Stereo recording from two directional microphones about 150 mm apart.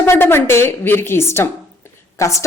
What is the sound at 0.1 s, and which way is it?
A woman's voice, 15° left (ahead or behind).